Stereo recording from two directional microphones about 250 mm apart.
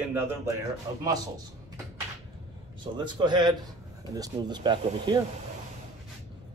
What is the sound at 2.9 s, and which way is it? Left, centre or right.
Speech, centre.